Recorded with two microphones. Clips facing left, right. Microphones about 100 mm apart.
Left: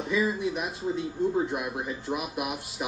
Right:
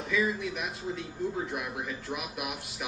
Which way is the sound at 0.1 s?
30° left (ahead or behind).